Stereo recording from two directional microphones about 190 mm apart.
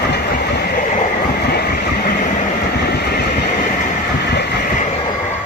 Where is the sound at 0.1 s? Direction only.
55° left (ahead or behind).